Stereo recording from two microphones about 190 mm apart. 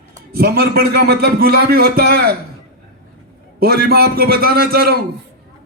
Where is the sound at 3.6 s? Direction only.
55° right (ahead or behind).